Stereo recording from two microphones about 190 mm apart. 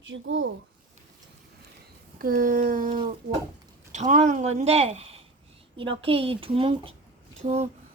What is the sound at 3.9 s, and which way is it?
Speech, 40° right (ahead or behind).